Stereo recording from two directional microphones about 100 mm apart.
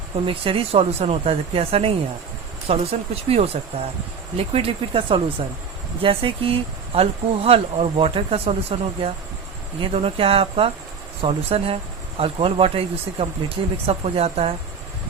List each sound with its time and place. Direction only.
0.3 s speech: 65° right (ahead or behind); by 3.8 s 90° right
4.4 s speech: 75° right (ahead or behind)
9.8 s speech: 70° right (ahead or behind)
13.8 s speech: 90° right